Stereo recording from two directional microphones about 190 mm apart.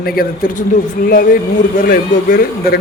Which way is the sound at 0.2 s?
45° left (ahead or behind).